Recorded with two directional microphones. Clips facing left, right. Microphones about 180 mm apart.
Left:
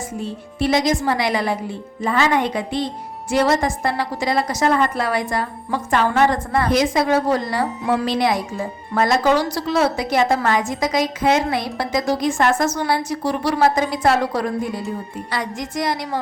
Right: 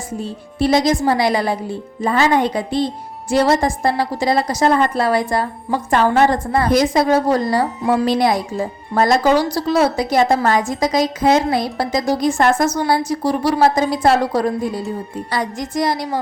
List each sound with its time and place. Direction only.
0.2 s a woman's voice: 35° right (ahead or behind)